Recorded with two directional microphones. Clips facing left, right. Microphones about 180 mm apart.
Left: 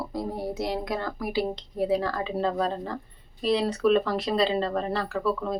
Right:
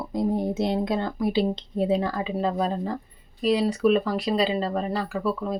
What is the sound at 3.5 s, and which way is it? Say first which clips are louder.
A woman's voice: right 1 dB; 5° right (ahead or behind).